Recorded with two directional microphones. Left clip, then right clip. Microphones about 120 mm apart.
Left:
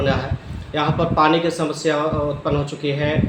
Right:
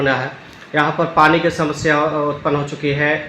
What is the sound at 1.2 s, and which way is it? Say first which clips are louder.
Speech: right 4 dB; 45° right (ahead or behind).